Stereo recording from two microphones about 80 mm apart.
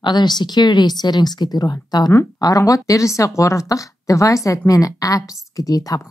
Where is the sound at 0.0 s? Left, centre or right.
Left.